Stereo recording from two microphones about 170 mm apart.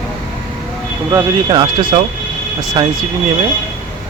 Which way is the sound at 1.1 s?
20° right (ahead or behind).